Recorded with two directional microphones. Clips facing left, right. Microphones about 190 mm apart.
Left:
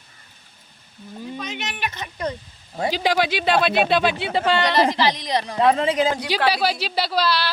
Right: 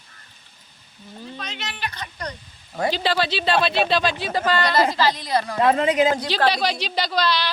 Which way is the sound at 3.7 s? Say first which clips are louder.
Left 2 dB; 60° left (ahead or behind).